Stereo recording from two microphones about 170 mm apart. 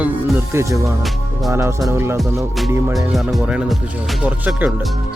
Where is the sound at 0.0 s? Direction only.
15° right (ahead or behind).